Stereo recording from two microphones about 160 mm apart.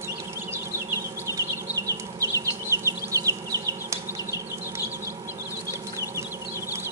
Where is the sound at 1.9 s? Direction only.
20° right (ahead or behind).